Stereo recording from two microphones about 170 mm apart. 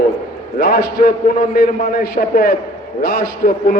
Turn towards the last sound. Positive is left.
turn(degrees=60)  # may be behind; listen again after turning